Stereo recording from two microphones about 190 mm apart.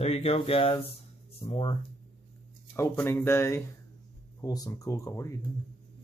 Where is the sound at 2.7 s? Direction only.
15° left (ahead or behind).